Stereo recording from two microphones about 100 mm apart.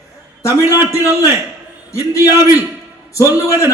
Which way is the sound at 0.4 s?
35° left (ahead or behind).